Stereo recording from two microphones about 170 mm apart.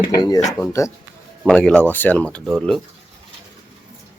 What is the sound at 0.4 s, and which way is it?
Speech, 20° left (ahead or behind).